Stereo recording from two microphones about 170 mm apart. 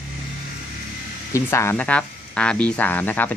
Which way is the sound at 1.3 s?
15° left (ahead or behind).